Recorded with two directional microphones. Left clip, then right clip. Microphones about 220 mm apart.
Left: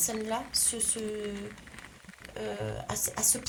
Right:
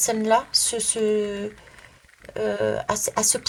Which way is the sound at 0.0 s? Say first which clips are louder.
Right 12 dB; 25° right (ahead or behind).